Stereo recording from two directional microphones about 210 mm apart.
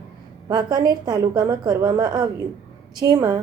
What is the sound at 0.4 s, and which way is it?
A woman's voice, 20° right (ahead or behind).